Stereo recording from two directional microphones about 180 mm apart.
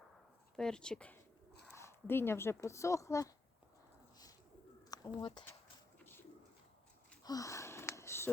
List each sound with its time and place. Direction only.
0.5 s speech: 5° left (ahead or behind)
4.9 s speech: 25° left (ahead or behind)
7.3 s a sound: 20° left (ahead or behind)